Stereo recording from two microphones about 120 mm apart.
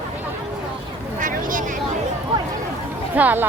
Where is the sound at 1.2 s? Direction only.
90° right.